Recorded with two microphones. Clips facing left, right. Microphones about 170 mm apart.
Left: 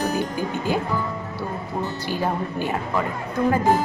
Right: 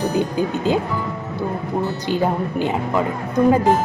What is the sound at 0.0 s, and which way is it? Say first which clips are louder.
Speech: right 4 dB; 15° right (ahead or behind).